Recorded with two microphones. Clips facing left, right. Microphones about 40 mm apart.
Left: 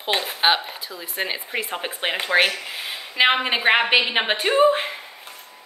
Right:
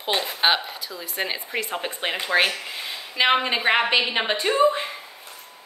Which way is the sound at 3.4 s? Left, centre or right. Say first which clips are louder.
Left 2 dB; left.